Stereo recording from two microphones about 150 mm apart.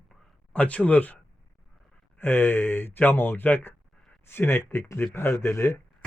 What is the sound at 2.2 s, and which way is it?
Speech, 15° left (ahead or behind).